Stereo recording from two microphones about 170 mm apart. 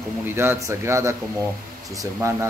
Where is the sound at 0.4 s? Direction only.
15° right (ahead or behind).